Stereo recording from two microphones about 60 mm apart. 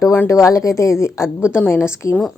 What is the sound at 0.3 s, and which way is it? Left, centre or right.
A woman's voice, left.